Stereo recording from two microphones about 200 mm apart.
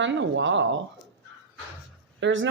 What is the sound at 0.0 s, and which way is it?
Speech, 65° right (ahead or behind).